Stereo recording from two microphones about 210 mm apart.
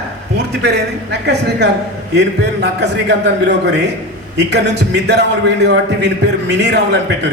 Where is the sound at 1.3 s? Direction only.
55° right (ahead or behind).